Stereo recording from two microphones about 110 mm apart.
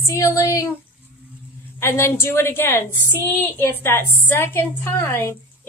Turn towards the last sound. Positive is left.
turn(degrees=20)  # may be behind; listen again after turning